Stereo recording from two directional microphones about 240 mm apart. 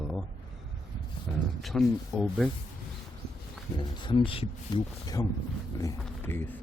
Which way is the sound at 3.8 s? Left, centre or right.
Centre.